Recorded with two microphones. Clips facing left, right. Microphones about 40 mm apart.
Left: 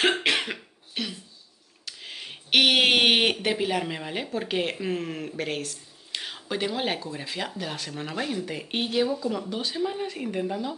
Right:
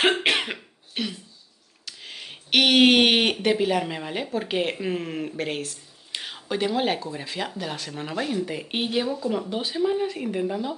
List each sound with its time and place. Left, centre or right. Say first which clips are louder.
0.2 s cough: right 2 dB; centre
1.9 s speech: even; centre